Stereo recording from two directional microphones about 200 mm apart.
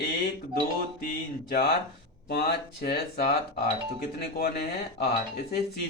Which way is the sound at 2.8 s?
50° left (ahead or behind).